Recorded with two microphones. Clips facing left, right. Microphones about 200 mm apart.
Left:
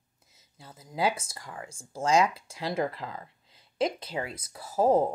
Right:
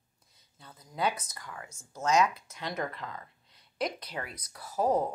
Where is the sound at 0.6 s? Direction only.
25° left (ahead or behind).